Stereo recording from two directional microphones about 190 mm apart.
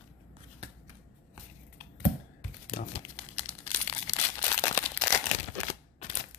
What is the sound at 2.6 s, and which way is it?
Crumpling, 45° left (ahead or behind).